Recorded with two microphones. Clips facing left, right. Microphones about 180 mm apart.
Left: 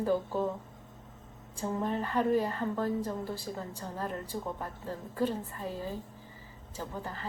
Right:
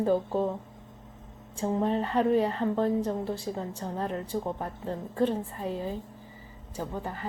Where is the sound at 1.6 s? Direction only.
25° right (ahead or behind).